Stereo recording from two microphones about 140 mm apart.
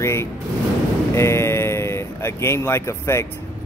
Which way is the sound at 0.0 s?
20° left (ahead or behind).